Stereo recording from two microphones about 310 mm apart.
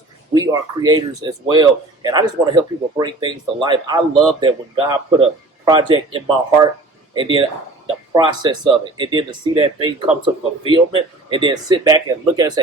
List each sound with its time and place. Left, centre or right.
0.3 s speech: centre